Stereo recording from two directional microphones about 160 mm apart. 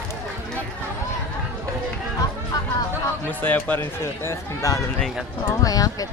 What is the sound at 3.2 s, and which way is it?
Speech, 10° left (ahead or behind).